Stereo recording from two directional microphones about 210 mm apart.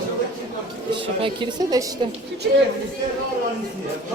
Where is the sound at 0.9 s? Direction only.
25° right (ahead or behind).